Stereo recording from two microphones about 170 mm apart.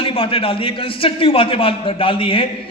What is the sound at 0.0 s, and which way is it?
A man's voice, 30° left (ahead or behind).